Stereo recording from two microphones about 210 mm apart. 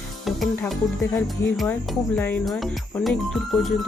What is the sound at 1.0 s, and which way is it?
Music, 10° left (ahead or behind).